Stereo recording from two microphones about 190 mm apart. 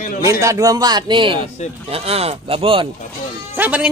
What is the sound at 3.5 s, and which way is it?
Speech, 10° right (ahead or behind).